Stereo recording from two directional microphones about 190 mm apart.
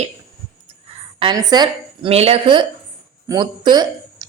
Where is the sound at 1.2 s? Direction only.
20° right (ahead or behind).